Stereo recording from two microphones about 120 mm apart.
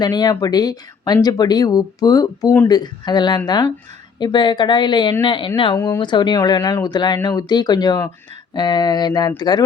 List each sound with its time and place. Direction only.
0.0 s speech: 35° left (ahead or behind)
5.7 s speech: 20° left (ahead or behind)
6.0 s speech: 40° left (ahead or behind)